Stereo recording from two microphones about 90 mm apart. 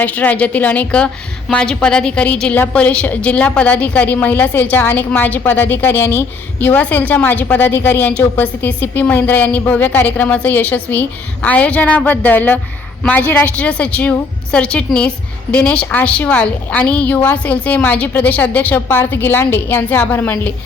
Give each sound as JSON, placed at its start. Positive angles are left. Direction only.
{"t": 0.0, "sound": "a woman's voice", "side_deg": 15}